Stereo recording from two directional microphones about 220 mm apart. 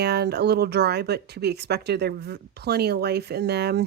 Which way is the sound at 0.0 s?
50° right (ahead or behind).